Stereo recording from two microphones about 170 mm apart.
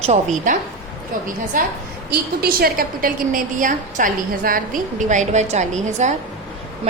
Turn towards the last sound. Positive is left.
turn(degrees=-45)  # may be behind; listen again after turning